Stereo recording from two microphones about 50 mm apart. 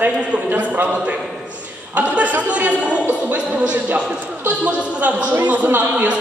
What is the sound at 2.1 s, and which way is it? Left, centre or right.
A man's voice, right.